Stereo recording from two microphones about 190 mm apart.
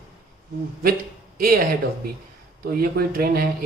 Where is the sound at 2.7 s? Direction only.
50° right (ahead or behind).